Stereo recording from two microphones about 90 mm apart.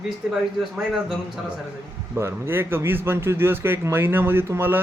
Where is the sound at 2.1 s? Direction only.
30° right (ahead or behind).